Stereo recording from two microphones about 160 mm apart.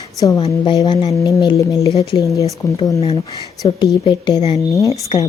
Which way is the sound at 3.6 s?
30° left (ahead or behind).